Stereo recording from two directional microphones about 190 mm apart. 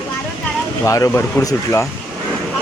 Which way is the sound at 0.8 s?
15° left (ahead or behind).